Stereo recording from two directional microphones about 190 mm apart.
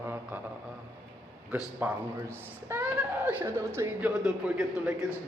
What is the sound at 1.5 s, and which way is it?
A woman's voice, 10° right (ahead or behind).